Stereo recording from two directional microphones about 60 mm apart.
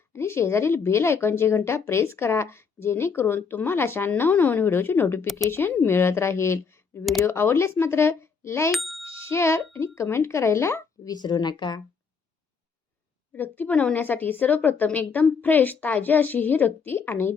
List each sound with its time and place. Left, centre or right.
0.1 s a woman's voice: left
8.7 s speech: centre
9.0 s speech: left
11.0 s speech: left
13.3 s a woman's voice: left